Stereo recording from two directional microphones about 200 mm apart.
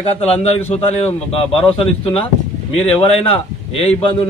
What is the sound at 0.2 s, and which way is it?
A man's voice, 30° left (ahead or behind).